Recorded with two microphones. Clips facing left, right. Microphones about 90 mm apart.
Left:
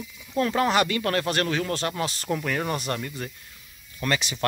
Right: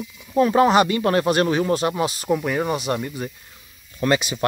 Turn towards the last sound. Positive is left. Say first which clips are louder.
# right 7 dB
turn(degrees=-20)  # may be behind; listen again after turning